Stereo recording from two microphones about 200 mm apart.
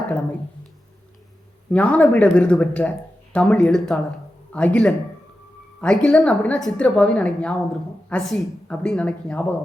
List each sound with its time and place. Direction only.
1.7 s a woman's voice: 5° left (ahead or behind)